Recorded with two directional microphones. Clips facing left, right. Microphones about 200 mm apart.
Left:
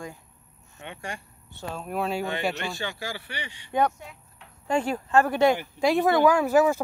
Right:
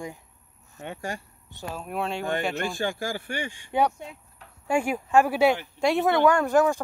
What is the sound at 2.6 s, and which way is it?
Speech, 50° right (ahead or behind).